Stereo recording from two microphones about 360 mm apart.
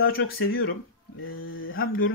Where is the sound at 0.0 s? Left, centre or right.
Left.